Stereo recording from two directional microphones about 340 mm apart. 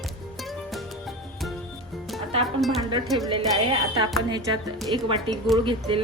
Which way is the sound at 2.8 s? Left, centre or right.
Centre.